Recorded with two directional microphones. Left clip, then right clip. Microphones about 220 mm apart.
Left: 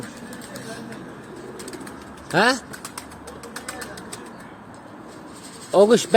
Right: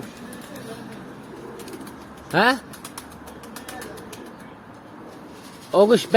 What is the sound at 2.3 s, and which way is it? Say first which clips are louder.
Speech: even; centre (ahead or behind).